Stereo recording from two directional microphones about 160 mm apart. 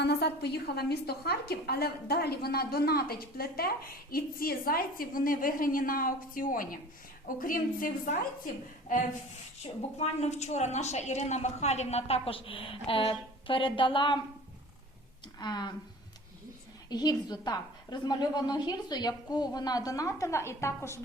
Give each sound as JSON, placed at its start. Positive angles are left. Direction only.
{"t": 0.0, "sound": "a woman's voice", "side_deg": 90}
{"t": 10.0, "sound": "a woman's voice", "side_deg": 45}
{"t": 15.4, "sound": "a woman's voice", "side_deg": 25}
{"t": 16.9, "sound": "a woman's voice", "side_deg": 25}